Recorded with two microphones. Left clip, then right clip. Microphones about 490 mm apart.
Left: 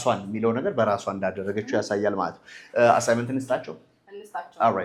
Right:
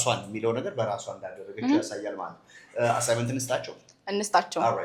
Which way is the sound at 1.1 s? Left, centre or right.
Left.